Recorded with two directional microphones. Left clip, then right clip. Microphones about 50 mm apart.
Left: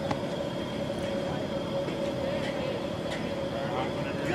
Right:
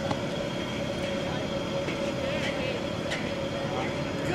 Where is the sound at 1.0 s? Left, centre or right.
Centre.